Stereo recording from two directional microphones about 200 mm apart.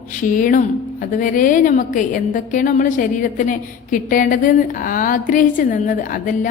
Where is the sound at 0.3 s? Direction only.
40° left (ahead or behind).